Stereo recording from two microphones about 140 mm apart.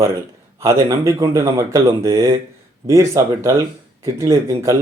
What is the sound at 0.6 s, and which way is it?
Speech, 25° right (ahead or behind).